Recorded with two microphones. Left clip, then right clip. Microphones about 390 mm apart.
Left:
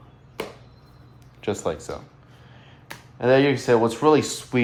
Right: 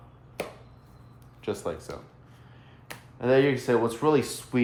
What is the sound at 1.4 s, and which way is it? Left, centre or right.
Speech, left.